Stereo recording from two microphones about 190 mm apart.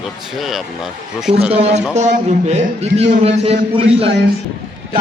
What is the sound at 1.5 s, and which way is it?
A man's voice, 35° right (ahead or behind).